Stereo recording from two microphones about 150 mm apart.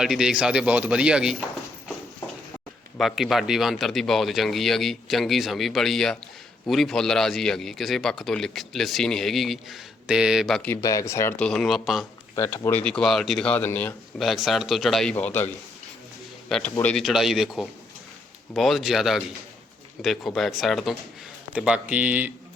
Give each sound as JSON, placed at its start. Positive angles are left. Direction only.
{"t": 0.0, "sound": "speech", "side_deg": -5}
{"t": 3.0, "sound": "speech", "side_deg": 0}
{"t": 10.8, "sound": "speech", "side_deg": 20}
{"t": 11.3, "sound": "speech", "side_deg": 5}
{"t": 12.4, "sound": "speech", "side_deg": 20}
{"t": 12.8, "sound": "speech", "side_deg": 5}
{"t": 14.2, "sound": "speech", "side_deg": 0}
{"t": 15.1, "sound": "a man's voice", "side_deg": 15}
{"t": 16.5, "sound": "speech", "side_deg": 5}